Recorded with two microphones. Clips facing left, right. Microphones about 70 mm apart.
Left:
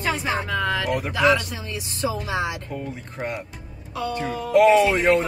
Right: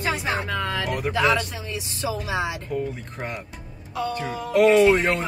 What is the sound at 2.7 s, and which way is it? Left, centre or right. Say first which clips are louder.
Speech: right 3 dB; centre.